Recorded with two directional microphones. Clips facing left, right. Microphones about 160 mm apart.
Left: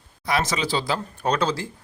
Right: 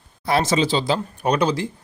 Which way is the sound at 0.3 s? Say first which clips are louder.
Right 5 dB; 30° right (ahead or behind).